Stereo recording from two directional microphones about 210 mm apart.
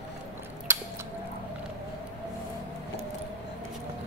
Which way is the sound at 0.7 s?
10° right (ahead or behind).